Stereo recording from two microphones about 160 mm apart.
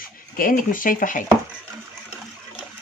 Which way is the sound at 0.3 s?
60° left (ahead or behind).